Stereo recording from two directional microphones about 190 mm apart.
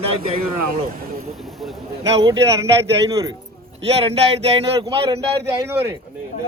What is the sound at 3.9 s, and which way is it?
Speech, 35° right (ahead or behind).